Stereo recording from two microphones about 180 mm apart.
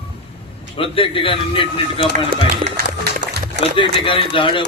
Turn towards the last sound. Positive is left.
turn(degrees=30)  # may be behind; listen again after turning